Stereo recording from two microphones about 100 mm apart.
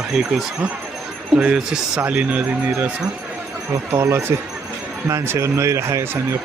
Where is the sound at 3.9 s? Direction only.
25° right (ahead or behind).